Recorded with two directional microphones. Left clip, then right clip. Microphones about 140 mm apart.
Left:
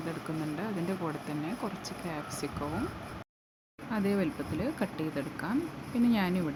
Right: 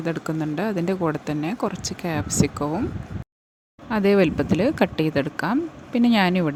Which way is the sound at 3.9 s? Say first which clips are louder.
Right 13 dB; 75° right (ahead or behind).